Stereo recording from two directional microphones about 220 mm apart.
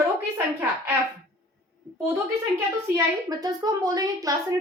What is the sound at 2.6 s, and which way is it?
A child's voice, 15° right (ahead or behind).